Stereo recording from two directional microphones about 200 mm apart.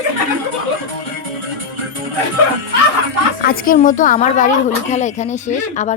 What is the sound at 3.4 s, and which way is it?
A woman's voice, 45° left (ahead or behind).